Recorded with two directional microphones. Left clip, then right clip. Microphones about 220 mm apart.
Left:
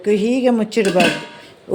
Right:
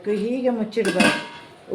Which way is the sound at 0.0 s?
45° left (ahead or behind).